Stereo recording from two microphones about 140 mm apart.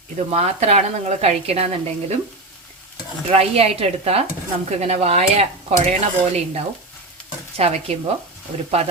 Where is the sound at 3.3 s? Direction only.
45° right (ahead or behind).